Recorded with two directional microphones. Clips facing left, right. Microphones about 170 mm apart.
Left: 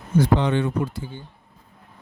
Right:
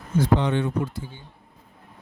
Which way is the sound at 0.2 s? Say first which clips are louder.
Left 2 dB; 90° left.